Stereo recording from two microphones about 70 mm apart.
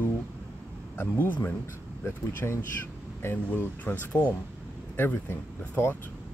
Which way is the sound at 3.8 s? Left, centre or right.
Left.